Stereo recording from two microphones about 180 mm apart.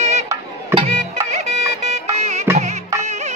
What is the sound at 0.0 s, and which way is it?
Music, 40° right (ahead or behind).